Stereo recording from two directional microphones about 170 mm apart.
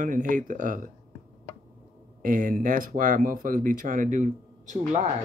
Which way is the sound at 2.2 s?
50° right (ahead or behind).